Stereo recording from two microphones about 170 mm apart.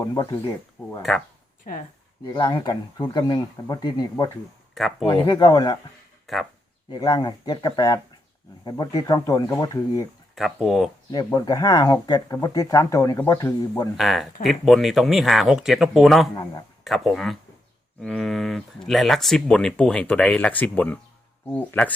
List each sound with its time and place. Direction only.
0.0 s speech: 20° left (ahead or behind)
0.8 s a sound: 5° left (ahead or behind)
2.2 s speech: 25° left (ahead or behind)
4.7 s speech: centre (ahead or behind)
5.0 s speech: 30° left (ahead or behind)
6.2 s speech: centre (ahead or behind)
6.9 s speech: 25° left (ahead or behind)
10.3 s speech: centre (ahead or behind)
11.1 s speech: 25° left (ahead or behind)
13.9 s speech: centre (ahead or behind)
16.3 s speech: 25° left (ahead or behind)
16.8 s speech: centre (ahead or behind)